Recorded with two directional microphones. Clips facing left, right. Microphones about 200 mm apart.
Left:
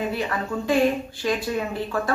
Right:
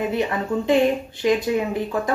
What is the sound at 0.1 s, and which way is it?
A woman's voice, 20° right (ahead or behind).